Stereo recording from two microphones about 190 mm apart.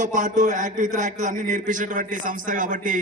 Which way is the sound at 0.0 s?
40° right (ahead or behind).